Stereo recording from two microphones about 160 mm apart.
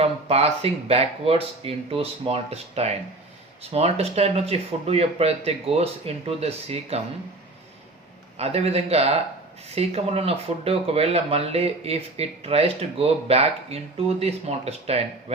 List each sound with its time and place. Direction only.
0.0 s speech: 40° right (ahead or behind)
8.4 s speech: 40° right (ahead or behind)